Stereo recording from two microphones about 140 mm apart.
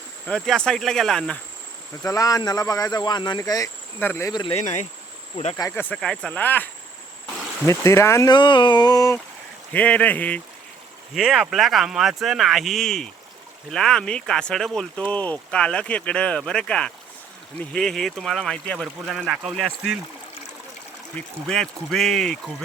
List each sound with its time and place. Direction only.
0.3 s speech: 5° left (ahead or behind)
2.0 s speech: 25° left (ahead or behind)
4.0 s speech: 15° left (ahead or behind)
4.3 s speech: 30° left (ahead or behind)
4.5 s speech: 55° left (ahead or behind)
5.5 s speech: 20° left (ahead or behind)
6.0 s speech: 5° left (ahead or behind)
7.7 s speech: 20° left (ahead or behind)
9.7 s speech: 10° left (ahead or behind)
11.1 s speech: centre (ahead or behind)
21.2 s speech: 5° left (ahead or behind)